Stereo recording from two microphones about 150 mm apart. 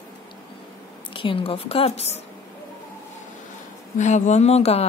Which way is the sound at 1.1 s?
35° left (ahead or behind).